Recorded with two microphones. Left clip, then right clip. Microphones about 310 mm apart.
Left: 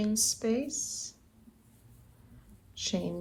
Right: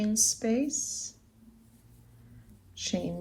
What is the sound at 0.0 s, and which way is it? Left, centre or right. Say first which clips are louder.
Speech: right 2 dB; centre.